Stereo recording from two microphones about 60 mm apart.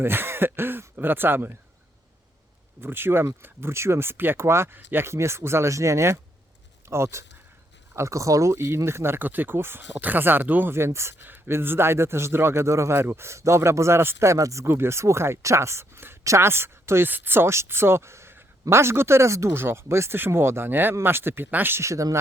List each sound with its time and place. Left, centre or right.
0.0 s speech: right
2.8 s a man's voice: right
14.6 s a man's voice: right
16.2 s a woman's voice: right
16.5 s speech: right
17.1 s a man's voice: right
21.8 s speech: right